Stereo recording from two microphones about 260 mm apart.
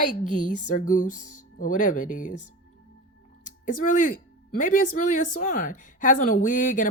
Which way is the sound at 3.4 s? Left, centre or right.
Left.